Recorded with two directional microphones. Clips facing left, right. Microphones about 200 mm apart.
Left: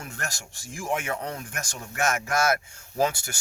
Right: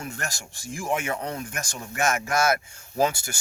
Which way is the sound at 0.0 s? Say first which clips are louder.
Right 2 dB; centre (ahead or behind).